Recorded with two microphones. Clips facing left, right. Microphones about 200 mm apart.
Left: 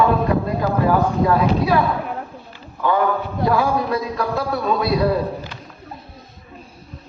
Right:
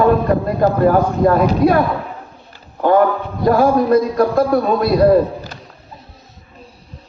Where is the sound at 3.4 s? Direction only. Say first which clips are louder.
Right 7 dB; 45° right (ahead or behind).